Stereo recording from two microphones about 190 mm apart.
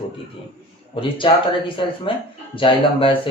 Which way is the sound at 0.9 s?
25° left (ahead or behind).